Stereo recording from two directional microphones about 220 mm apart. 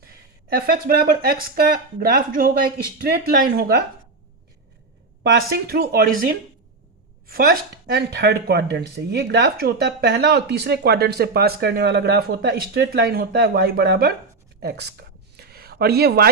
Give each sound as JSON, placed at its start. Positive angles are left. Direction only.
{"t": 0.5, "sound": "speech", "side_deg": -40}
{"t": 5.2, "sound": "speech", "side_deg": -45}
{"t": 14.6, "sound": "a sound", "side_deg": -50}